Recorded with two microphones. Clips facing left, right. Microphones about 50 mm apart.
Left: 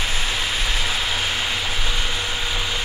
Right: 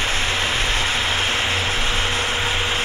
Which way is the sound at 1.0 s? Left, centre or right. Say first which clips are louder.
Right 3 dB; right.